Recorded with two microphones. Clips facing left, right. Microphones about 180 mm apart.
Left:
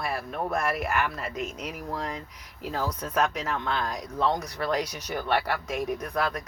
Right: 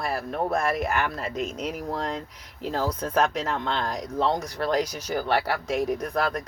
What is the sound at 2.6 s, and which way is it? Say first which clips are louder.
Speech: right 4 dB; 30° right (ahead or behind).